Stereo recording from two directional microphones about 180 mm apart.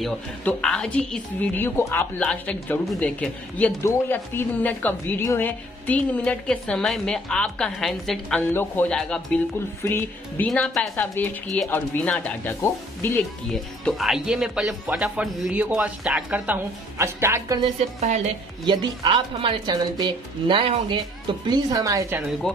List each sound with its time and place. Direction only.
0.0 s a woman's voice: 5° left (ahead or behind); by 17.6 s 15° right (ahead or behind)
18.7 s a woman's voice: 25° right (ahead or behind)